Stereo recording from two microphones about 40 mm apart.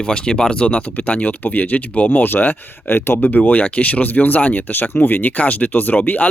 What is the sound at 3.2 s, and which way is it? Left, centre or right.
Speech, left.